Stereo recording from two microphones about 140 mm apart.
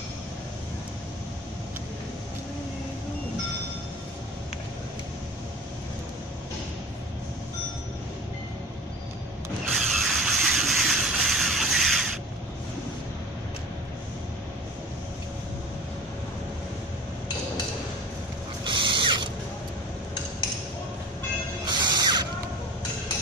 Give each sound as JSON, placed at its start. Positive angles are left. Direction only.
{"t": 9.7, "sound": "mechanisms", "side_deg": 0}
{"t": 18.6, "sound": "mechanisms", "side_deg": -35}
{"t": 21.6, "sound": "music", "side_deg": -30}